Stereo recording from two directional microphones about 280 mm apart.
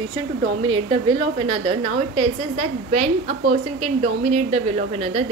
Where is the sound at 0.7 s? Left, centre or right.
Centre.